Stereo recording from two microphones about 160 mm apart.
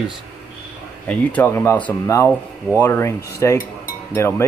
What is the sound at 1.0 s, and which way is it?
Speech, 10° left (ahead or behind).